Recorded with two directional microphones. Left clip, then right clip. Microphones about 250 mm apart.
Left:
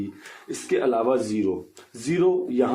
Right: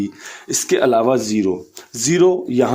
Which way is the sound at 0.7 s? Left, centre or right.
Right.